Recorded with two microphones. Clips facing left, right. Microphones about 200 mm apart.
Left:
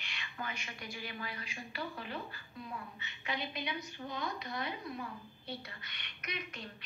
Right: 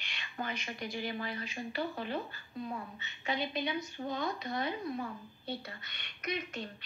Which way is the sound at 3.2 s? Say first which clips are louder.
Right 5 dB; 25° right (ahead or behind).